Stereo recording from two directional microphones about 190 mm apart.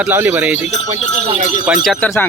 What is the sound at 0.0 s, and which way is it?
Speech, 10° right (ahead or behind).